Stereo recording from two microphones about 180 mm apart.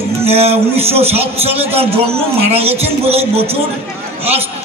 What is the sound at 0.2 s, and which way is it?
A man's voice, 35° right (ahead or behind).